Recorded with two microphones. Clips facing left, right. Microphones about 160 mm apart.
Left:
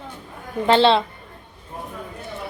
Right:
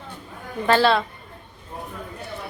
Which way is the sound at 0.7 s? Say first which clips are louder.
Left 2 dB; 25° left (ahead or behind).